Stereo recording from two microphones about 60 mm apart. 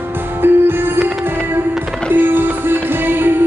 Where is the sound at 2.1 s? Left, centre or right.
Right.